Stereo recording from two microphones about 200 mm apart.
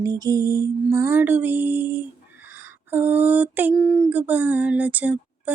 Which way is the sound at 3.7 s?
Centre (ahead or behind).